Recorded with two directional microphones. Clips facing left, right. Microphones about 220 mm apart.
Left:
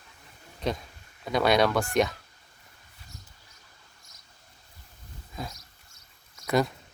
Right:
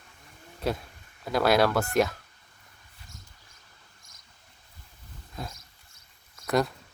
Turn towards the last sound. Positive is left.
turn(degrees=0)  # may be behind; listen again after turning